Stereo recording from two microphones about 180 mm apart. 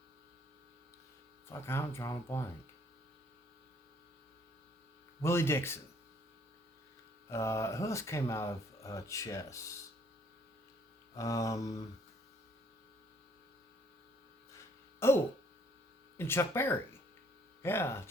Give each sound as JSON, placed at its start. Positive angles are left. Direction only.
{"t": 1.5, "sound": "speech", "side_deg": 15}
{"t": 5.2, "sound": "speech", "side_deg": 15}
{"t": 7.3, "sound": "speech", "side_deg": 15}
{"t": 11.2, "sound": "mantra", "side_deg": 20}
{"t": 14.9, "sound": "a sound", "side_deg": 15}
{"t": 16.1, "sound": "speech", "side_deg": 15}